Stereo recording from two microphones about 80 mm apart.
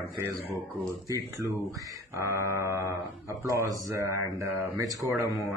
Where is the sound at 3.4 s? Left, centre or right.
Right.